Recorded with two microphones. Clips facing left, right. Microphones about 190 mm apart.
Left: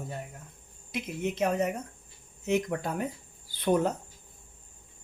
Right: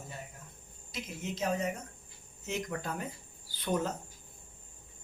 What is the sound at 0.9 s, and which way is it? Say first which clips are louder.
Speech: left 7 dB; 60° left (ahead or behind).